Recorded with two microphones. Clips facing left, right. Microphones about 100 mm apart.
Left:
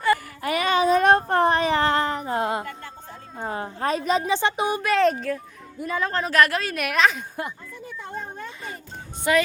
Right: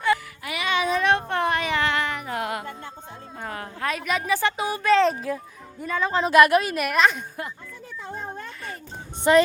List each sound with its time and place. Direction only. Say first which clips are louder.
0.4 s a sound: left 5 dB; 45° left (ahead or behind); by 4.8 s 20° left (ahead or behind)
4.8 s a woman's voice: right 3 dB; 5° left (ahead or behind)
6.2 s a woman's voice: right 6 dB; 15° right (ahead or behind)
6.7 s a woman's voice: even; centre (ahead or behind)
9.3 s music: right 4 dB; 35° right (ahead or behind)